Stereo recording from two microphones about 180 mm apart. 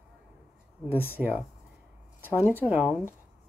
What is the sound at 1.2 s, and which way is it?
Speech, 5° right (ahead or behind).